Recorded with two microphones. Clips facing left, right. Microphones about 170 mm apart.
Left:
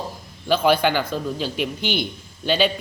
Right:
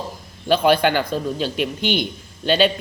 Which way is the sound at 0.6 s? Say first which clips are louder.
Right 1 dB; 15° right (ahead or behind).